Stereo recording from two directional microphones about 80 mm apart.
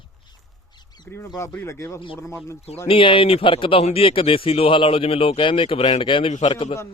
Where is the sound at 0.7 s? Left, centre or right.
Left.